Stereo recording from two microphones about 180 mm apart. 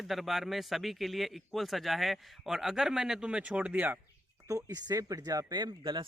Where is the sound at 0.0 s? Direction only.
Centre (ahead or behind).